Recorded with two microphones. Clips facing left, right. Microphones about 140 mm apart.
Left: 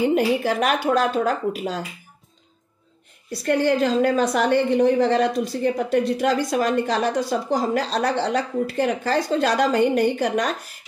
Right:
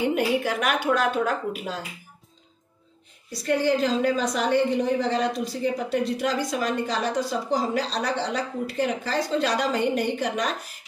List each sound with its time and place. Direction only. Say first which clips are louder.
0.1 s speech: left 4 dB; 35° left (ahead or behind)
3.4 s a woman's voice: left 3 dB; 55° left (ahead or behind)